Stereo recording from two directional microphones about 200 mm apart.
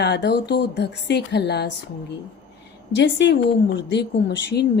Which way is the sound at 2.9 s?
60° left (ahead or behind).